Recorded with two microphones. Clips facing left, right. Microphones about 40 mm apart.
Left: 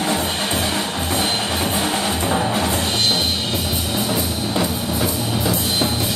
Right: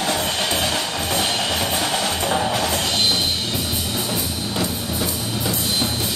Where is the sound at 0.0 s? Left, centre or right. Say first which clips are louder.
Left 1 dB; right.